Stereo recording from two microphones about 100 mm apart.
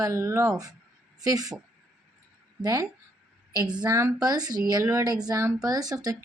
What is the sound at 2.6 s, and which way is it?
Speech, 40° right (ahead or behind).